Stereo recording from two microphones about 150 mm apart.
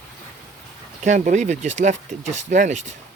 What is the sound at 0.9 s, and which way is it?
Speech, 55° right (ahead or behind).